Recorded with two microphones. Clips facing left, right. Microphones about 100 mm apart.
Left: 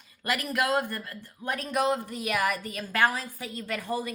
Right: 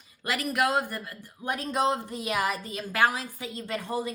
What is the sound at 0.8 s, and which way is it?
A woman's voice, 15° right (ahead or behind).